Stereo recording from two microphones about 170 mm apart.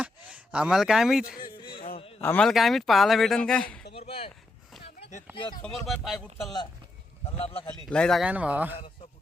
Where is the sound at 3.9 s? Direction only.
35° left (ahead or behind).